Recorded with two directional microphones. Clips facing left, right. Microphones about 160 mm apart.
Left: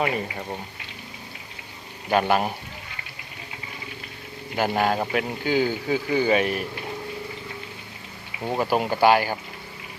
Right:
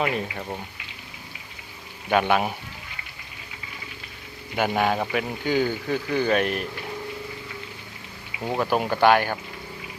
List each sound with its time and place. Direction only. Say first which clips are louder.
0.0 s speech: even; centre (ahead or behind)
2.0 s speech: even; centre (ahead or behind)
4.5 s speech: even; centre (ahead or behind)
8.4 s speech: even; 10° left (ahead or behind)